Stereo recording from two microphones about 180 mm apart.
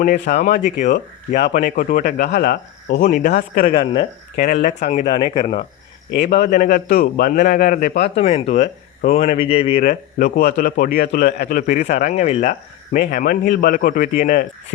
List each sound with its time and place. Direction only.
0.0 s speech: 55° left (ahead or behind)
0.8 s a man's voice: 45° left (ahead or behind)
5.1 s speech: 25° left (ahead or behind)
6.1 s a man's voice: 50° left (ahead or behind)
8.1 s speech: 35° left (ahead or behind)
9.8 s a man's voice: 55° left (ahead or behind)